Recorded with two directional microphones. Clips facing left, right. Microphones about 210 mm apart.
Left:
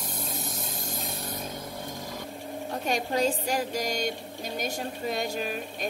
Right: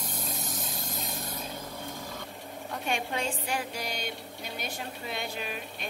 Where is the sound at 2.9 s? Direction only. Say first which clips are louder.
Left 6 dB; 40° left (ahead or behind).